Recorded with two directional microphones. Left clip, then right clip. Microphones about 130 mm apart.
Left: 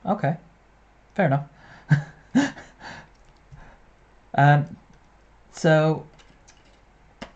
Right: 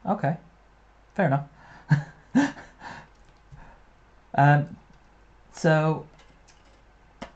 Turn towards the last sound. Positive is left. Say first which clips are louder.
# left 1 dB
turn(degrees=25)  # may be behind; listen again after turning